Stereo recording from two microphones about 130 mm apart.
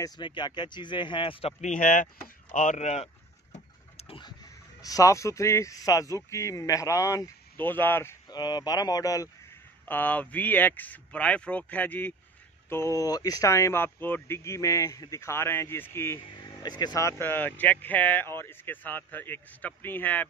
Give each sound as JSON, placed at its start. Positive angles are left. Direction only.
{"t": 0.2, "sound": "speech", "side_deg": 35}
{"t": 1.6, "sound": "speech", "side_deg": 80}
{"t": 3.5, "sound": "a sound", "side_deg": 50}
{"t": 4.8, "sound": "speech", "side_deg": 25}
{"t": 8.3, "sound": "speech", "side_deg": 35}
{"t": 9.8, "sound": "speech", "side_deg": 15}
{"t": 16.4, "sound": "speech", "side_deg": 30}
{"t": 17.2, "sound": "speech", "side_deg": 15}